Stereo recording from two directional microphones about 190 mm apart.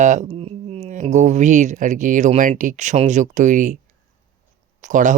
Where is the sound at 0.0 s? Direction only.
40° right (ahead or behind).